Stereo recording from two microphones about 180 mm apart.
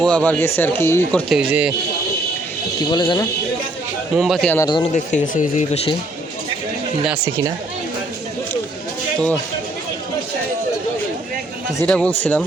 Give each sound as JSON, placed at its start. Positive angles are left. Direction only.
{"t": 0.0, "sound": "speech", "side_deg": 5}
{"t": 1.3, "sound": "speech", "side_deg": -5}
{"t": 2.9, "sound": "speech", "side_deg": 25}
{"t": 4.1, "sound": "speech", "side_deg": 0}
{"t": 4.9, "sound": "speech", "side_deg": 45}
{"t": 11.8, "sound": "speech", "side_deg": 5}